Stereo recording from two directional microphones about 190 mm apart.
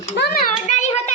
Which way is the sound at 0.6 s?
35° left (ahead or behind).